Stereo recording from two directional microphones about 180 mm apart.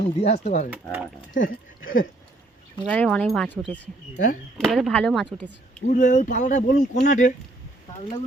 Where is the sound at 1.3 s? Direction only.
90° left.